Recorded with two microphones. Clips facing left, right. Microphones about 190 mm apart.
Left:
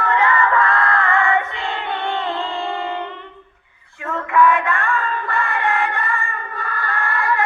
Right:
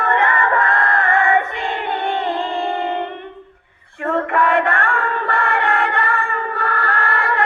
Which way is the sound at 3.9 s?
60° right (ahead or behind).